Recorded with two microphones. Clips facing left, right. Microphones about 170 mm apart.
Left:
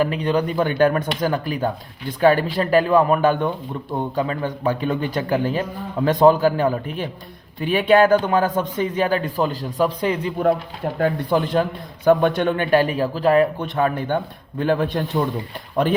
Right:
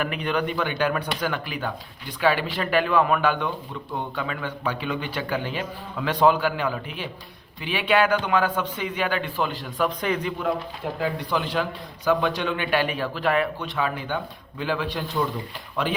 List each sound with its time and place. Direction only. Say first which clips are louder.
0.0 s a man's voice: left 6 dB; 35° left (ahead or behind)
11.0 s a man's voice: left 7 dB; 50° left (ahead or behind)